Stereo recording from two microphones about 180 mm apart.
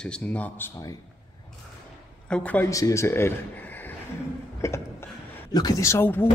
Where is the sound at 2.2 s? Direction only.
5° left (ahead or behind).